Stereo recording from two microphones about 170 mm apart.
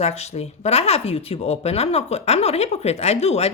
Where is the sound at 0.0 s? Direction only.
40° left (ahead or behind).